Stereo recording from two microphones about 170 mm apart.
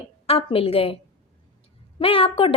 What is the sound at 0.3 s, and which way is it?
Speech, 35° left (ahead or behind).